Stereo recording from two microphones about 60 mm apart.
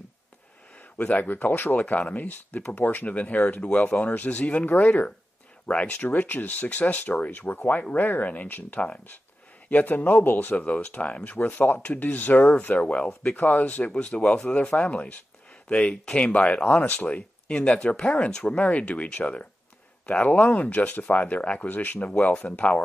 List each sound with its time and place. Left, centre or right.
0.7 s speech: left
8.7 s speech: centre
9.7 s speech: left